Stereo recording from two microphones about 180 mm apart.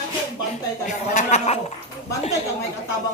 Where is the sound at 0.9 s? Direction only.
40° left (ahead or behind).